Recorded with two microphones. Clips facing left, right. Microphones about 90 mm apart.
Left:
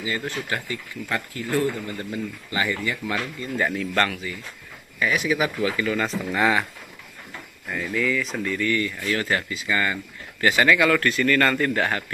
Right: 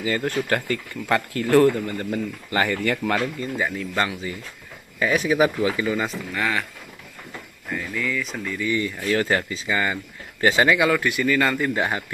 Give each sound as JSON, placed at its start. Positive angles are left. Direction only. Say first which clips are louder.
{"t": 0.0, "sound": "speech", "louder": "right 5 dB", "side_deg": -45}
{"t": 0.7, "sound": "speech", "louder": "right 6 dB", "side_deg": -70}
{"t": 1.9, "sound": "speech", "louder": "right 3 dB", "side_deg": -40}
{"t": 3.5, "sound": "speech", "louder": "left 4 dB", "side_deg": 0}
{"t": 4.9, "sound": "speech", "louder": "right 3 dB", "side_deg": -35}
{"t": 5.6, "sound": "speech", "louder": "right 1 dB", "side_deg": -20}
{"t": 6.3, "sound": "speech", "louder": "left 5 dB", "side_deg": 20}
{"t": 7.7, "sound": "speech", "louder": "left 2 dB", "side_deg": 0}
{"t": 8.5, "sound": "speech", "louder": "right 1 dB", "side_deg": -15}
{"t": 9.0, "sound": "speech", "louder": "right 3 dB", "side_deg": -30}
{"t": 9.7, "sound": "speech", "louder": "even", "side_deg": -20}